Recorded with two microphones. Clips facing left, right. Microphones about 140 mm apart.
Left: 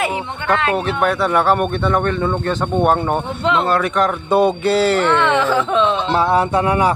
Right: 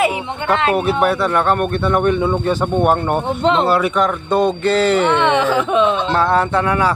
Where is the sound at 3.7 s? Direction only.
5° right (ahead or behind).